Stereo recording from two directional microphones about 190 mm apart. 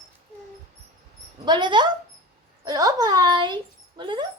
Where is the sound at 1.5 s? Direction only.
25° right (ahead or behind).